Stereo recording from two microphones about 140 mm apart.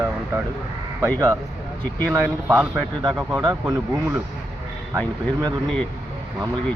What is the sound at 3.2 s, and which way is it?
Speech, 15° right (ahead or behind).